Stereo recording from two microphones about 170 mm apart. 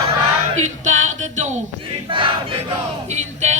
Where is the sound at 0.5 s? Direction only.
45° right (ahead or behind).